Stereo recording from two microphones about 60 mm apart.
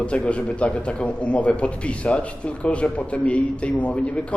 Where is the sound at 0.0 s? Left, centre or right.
Centre.